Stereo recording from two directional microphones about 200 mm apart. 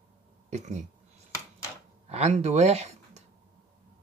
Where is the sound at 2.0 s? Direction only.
35° right (ahead or behind).